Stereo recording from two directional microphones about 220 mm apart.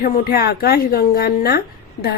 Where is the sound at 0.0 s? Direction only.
45° left (ahead or behind).